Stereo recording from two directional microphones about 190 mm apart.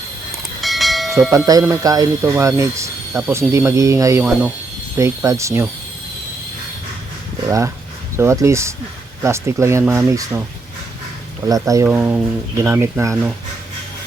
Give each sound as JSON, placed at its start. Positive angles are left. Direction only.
{"t": 0.6, "sound": "train", "side_deg": 0}
{"t": 1.5, "sound": "speech", "side_deg": -15}
{"t": 7.4, "sound": "speech", "side_deg": -15}
{"t": 11.4, "sound": "speech", "side_deg": -20}
{"t": 11.9, "sound": "speech", "side_deg": -5}